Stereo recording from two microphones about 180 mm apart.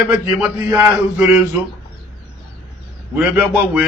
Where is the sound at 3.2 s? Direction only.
5° right (ahead or behind).